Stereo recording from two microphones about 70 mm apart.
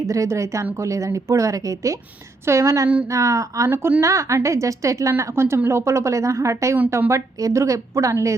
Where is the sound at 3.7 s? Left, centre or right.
Right.